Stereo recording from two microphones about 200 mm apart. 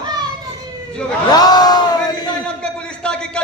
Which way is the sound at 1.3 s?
20° left (ahead or behind).